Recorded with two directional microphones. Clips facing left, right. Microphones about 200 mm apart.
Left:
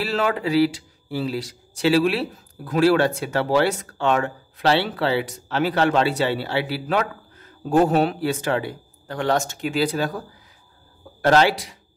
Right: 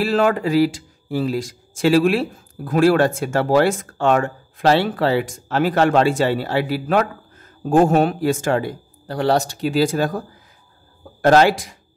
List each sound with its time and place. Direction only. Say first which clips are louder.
0.0 s speech: right 5 dB; 50° right (ahead or behind)
11.2 s speech: right 4 dB; 50° right (ahead or behind)